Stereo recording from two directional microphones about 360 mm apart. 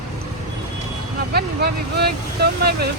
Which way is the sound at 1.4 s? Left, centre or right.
Right.